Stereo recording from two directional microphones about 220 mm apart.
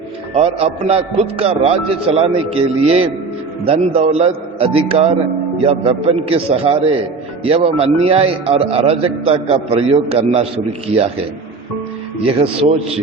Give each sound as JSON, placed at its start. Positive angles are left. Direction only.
{"t": 0.3, "sound": "a man's voice", "side_deg": -25}
{"t": 12.2, "sound": "a man's voice", "side_deg": -25}